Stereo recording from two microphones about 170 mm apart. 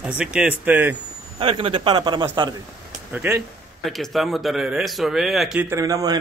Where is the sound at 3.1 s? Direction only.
10° right (ahead or behind).